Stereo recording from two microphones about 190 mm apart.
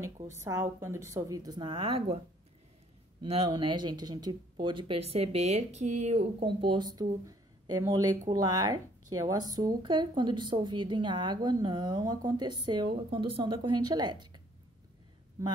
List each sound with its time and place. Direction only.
0.0 s a woman's voice: 15° right (ahead or behind); by 2.1 s 30° right (ahead or behind)
3.2 s a woman's voice: 25° right (ahead or behind)